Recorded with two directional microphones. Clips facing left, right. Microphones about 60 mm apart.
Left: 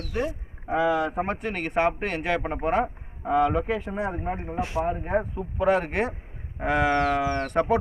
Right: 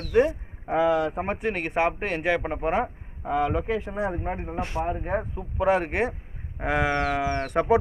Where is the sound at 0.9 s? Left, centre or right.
Centre.